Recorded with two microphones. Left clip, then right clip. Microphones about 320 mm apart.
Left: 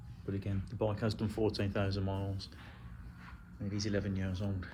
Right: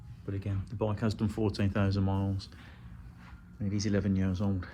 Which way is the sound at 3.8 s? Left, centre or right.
Centre.